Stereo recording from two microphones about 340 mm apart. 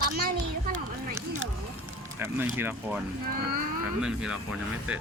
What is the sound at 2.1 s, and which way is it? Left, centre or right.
Speech, centre.